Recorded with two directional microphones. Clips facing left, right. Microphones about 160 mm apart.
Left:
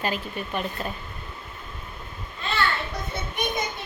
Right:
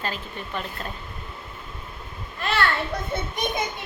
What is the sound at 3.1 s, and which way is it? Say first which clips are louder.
Children playing: right 4 dB; 50° right (ahead or behind).